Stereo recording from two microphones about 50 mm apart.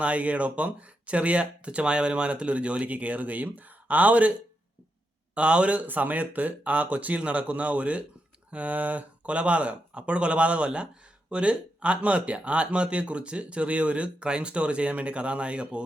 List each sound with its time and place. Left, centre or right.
0.0 s speech: right